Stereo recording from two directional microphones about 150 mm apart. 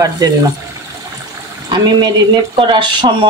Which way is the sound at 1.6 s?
30° right (ahead or behind).